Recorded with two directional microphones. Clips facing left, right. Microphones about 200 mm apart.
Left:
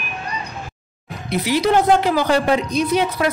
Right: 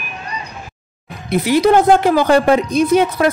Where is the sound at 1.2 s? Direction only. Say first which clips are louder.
Right 5 dB; 50° right (ahead or behind).